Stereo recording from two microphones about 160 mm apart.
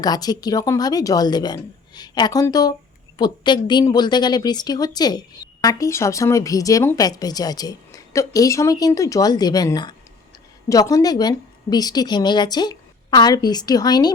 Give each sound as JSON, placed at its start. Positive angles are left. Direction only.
{"t": 0.0, "sound": "a woman's voice", "side_deg": 25}